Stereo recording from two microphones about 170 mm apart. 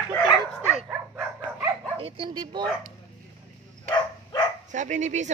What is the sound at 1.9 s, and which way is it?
Speech, 30° right (ahead or behind).